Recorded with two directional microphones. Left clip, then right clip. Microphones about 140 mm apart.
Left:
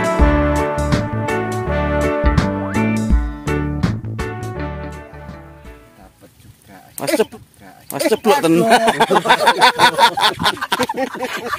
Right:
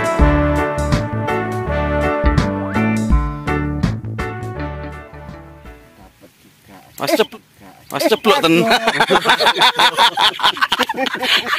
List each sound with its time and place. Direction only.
0.0 s music: centre (ahead or behind)
7.9 s speech: 25° left (ahead or behind); by 11.4 s 5° left (ahead or behind)